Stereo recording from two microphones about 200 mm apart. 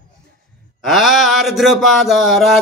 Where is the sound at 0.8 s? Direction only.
Centre (ahead or behind).